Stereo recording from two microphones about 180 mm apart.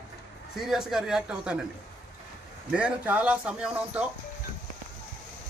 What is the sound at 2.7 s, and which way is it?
Speech, 5° right (ahead or behind).